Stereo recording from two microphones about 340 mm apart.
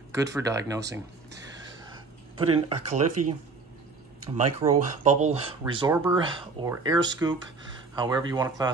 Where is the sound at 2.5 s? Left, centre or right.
Right.